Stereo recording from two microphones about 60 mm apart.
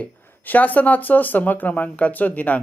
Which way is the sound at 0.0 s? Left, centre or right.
Left.